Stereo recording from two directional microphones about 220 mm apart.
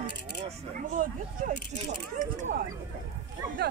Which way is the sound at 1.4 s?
35° right (ahead or behind).